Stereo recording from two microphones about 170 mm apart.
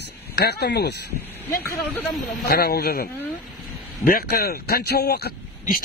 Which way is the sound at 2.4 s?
65° left (ahead or behind).